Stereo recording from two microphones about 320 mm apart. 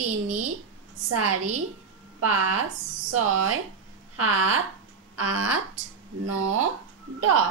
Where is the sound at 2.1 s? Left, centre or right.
Right.